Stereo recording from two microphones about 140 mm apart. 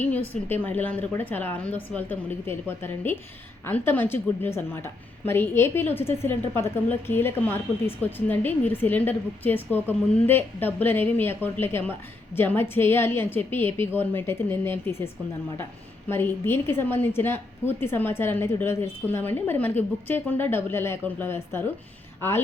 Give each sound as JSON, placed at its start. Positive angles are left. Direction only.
{"t": 0.4, "sound": "a woman's voice", "side_deg": 15}
{"t": 16.0, "sound": "a woman's voice", "side_deg": 15}